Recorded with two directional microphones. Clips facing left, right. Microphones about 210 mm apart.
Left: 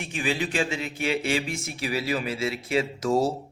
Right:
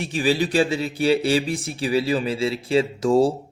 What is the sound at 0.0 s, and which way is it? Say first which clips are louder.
Speech: right 7 dB; 35° right (ahead or behind).